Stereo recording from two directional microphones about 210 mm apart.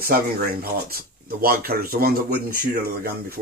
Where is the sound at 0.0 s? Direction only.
45° right (ahead or behind).